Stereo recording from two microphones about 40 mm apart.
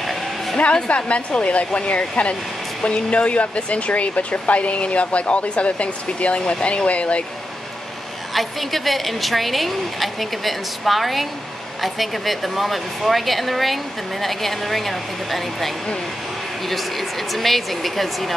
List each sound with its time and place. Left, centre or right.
0.0 s vehicle: centre
0.8 s speech: left
8.3 s a woman's voice: centre